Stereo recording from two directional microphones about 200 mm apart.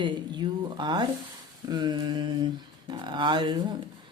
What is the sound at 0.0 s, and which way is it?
Speech, 20° right (ahead or behind).